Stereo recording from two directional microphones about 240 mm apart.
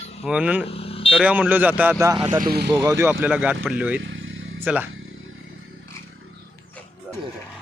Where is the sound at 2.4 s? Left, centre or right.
Right.